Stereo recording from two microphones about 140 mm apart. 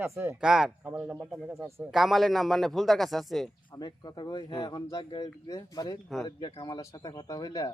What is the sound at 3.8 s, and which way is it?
A man's voice, 30° left (ahead or behind).